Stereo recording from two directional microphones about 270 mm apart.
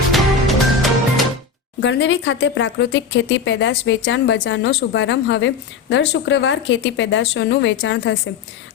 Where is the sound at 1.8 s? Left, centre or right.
Left.